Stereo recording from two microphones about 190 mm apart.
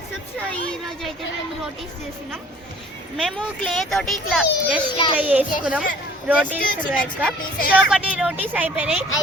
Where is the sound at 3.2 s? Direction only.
Centre (ahead or behind).